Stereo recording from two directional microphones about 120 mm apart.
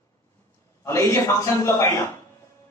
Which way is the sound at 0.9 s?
25° left (ahead or behind).